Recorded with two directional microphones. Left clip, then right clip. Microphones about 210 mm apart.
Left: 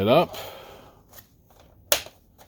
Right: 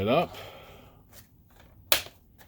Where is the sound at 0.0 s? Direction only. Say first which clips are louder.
Left 6 dB; 40° left (ahead or behind).